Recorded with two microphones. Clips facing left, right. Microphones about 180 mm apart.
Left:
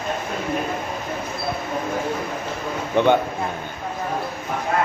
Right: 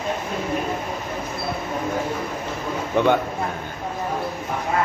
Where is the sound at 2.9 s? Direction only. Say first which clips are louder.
Left 2 dB; 5° right (ahead or behind).